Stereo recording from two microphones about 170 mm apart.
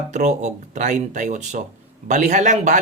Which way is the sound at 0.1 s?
45° right (ahead or behind).